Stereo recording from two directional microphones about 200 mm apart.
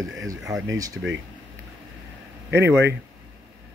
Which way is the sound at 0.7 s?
15° right (ahead or behind).